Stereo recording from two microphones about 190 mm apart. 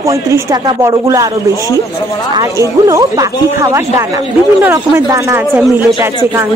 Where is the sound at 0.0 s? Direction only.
15° right (ahead or behind).